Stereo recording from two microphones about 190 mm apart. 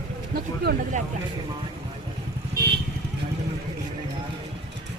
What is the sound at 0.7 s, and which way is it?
Vehicle, 55° right (ahead or behind).